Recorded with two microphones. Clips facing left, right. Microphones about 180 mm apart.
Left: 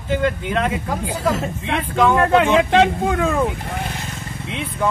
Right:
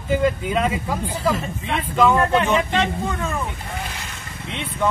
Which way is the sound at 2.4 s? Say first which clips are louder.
Left 5 dB; 90° left.